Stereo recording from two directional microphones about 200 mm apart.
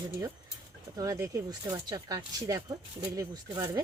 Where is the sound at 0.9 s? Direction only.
15° right (ahead or behind).